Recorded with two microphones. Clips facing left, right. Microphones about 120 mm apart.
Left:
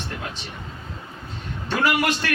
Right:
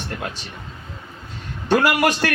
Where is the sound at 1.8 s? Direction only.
45° right (ahead or behind).